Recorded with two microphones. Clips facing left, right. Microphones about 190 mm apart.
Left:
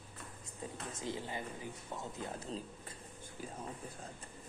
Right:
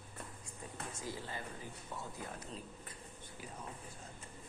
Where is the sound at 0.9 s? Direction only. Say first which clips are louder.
Left 4 dB; 20° left (ahead or behind).